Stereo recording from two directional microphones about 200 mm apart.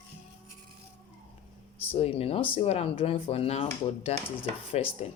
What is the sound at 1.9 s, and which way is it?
Speech, 30° left (ahead or behind).